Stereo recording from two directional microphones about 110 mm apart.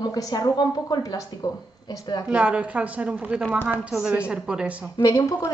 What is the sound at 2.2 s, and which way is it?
Speech, 10° right (ahead or behind).